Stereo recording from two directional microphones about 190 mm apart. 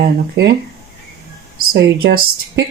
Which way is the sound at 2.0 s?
60° right (ahead or behind).